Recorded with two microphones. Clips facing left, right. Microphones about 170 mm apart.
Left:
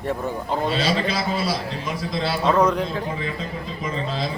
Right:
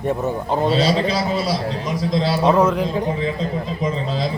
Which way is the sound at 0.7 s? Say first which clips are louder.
Right 5 dB; 40° right (ahead or behind).